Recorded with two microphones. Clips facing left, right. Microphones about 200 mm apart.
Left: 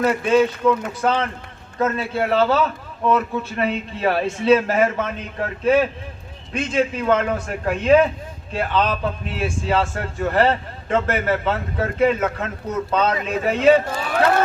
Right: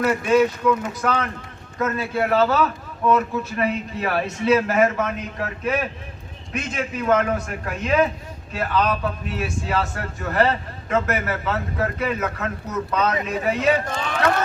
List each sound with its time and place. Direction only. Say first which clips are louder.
0.0 s a man's voice: left 1 dB; 25° left (ahead or behind)
13.9 s a man's voice: left 2 dB; 5° left (ahead or behind)